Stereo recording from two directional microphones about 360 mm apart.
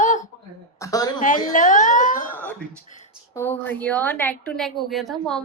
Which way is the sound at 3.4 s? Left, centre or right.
Centre.